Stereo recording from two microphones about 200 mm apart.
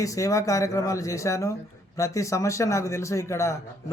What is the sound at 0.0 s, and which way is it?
Speech, 15° left (ahead or behind).